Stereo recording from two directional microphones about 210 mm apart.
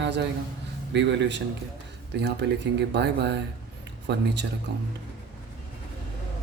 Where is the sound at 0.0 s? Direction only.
55° right (ahead or behind).